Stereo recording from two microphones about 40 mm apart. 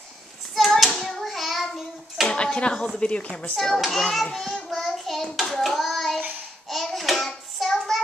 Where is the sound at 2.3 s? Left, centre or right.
Left.